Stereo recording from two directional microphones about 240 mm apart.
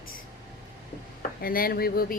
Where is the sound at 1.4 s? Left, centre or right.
Left.